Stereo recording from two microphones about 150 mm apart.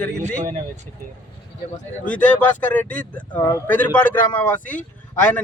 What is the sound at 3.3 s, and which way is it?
Speech, 25° left (ahead or behind).